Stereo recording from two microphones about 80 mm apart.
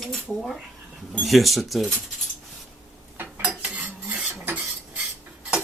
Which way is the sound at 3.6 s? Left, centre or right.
Right.